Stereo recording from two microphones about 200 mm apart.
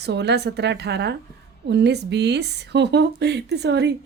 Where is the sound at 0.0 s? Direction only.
55° right (ahead or behind).